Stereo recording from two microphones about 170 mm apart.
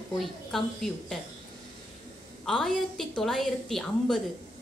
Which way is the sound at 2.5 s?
5° left (ahead or behind).